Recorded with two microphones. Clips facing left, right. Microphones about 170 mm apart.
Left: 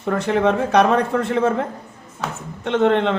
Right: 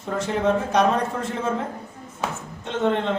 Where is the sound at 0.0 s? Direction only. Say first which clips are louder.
Left 5 dB; 65° left (ahead or behind).